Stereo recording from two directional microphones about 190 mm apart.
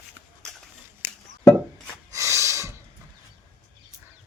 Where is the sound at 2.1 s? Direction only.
15° right (ahead or behind).